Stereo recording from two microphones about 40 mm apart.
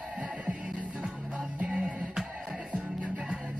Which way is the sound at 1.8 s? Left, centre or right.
Centre.